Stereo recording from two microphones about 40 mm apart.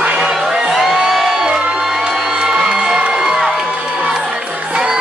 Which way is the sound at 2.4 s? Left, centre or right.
Centre.